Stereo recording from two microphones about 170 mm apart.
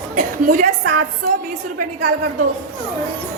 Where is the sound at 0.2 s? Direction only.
55° right (ahead or behind).